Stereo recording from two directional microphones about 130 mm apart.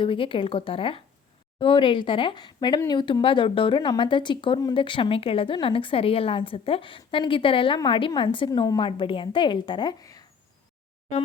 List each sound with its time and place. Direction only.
0.0 s a woman's voice: 40° left (ahead or behind)
8.4 s a woman's voice: 30° left (ahead or behind)
8.8 s speech: 40° left (ahead or behind)